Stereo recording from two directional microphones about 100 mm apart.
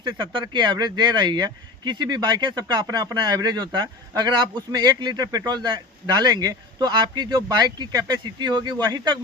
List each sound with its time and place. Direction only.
0.0 s speech: 50° right (ahead or behind)